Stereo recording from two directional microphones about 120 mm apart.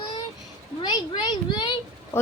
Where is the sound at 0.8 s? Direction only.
40° left (ahead or behind).